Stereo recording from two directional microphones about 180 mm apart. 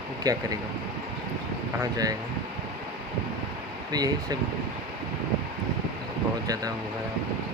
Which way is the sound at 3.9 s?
20° right (ahead or behind).